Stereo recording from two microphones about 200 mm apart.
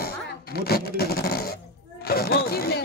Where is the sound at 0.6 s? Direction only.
50° left (ahead or behind).